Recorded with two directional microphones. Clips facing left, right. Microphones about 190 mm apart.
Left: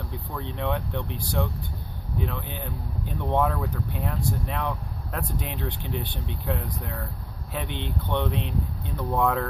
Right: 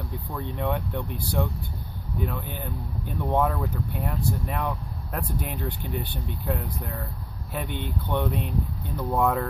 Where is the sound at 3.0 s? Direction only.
5° right (ahead or behind).